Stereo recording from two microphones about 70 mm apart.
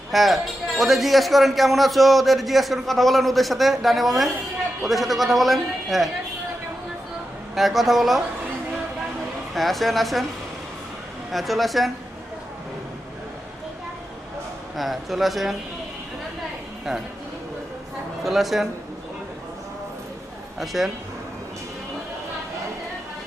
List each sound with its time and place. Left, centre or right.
0.1 s a man's voice: centre
7.5 s a man's voice: centre
9.6 s a man's voice: centre
11.3 s a man's voice: centre
14.8 s a man's voice: centre
18.2 s speech: centre
20.6 s a man's voice: centre